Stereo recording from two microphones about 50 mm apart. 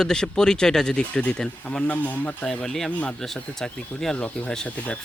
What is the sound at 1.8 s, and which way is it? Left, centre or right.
Speech, left.